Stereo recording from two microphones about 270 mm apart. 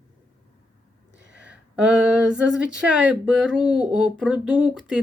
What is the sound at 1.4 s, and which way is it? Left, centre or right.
Speech, centre.